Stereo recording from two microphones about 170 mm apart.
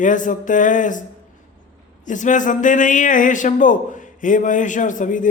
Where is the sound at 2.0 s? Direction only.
50° left (ahead or behind).